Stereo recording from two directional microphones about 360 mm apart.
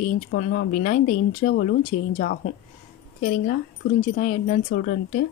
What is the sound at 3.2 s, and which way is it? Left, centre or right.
A woman's voice, left.